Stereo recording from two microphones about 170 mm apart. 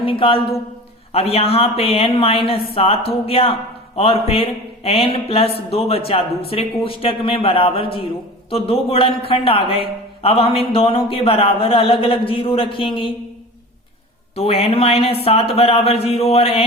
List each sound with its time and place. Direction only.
0.0 s speech: 30° left (ahead or behind)
14.3 s speech: 35° left (ahead or behind)